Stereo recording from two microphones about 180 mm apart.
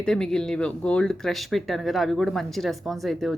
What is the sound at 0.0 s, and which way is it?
Speech, 5° left (ahead or behind).